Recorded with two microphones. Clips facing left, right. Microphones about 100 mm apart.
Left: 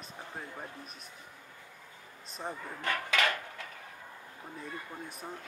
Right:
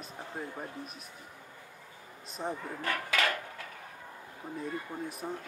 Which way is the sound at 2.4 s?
10° right (ahead or behind).